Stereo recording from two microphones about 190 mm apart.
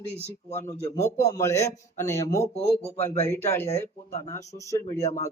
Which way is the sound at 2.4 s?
35° left (ahead or behind).